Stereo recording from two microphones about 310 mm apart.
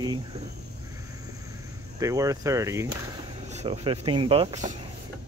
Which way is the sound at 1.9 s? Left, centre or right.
Centre.